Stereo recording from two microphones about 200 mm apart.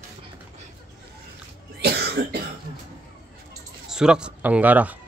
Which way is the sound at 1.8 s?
55° right (ahead or behind).